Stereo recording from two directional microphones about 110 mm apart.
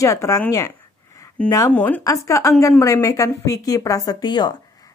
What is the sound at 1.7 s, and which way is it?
Speech, 15° left (ahead or behind).